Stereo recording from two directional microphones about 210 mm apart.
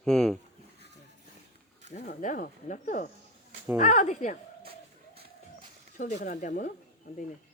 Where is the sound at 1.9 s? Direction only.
35° left (ahead or behind).